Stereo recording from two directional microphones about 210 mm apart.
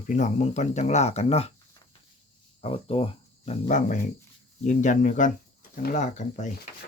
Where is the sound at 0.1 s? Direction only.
35° left (ahead or behind).